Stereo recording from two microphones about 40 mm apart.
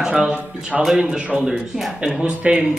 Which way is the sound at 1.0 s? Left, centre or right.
Right.